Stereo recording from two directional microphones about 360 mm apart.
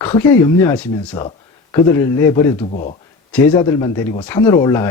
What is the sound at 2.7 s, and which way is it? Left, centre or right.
Speech, left.